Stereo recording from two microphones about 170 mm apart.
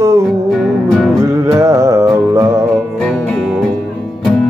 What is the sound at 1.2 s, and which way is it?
Music, 15° right (ahead or behind).